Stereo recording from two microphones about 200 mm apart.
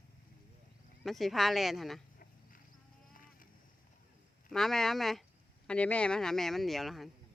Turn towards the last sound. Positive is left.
turn(degrees=0)  # may be behind; listen again after turning